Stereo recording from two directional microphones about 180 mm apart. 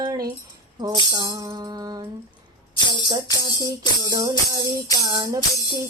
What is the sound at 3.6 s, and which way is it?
Music, 20° right (ahead or behind).